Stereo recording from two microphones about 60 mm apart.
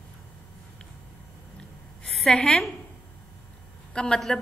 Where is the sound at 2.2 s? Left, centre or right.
Centre.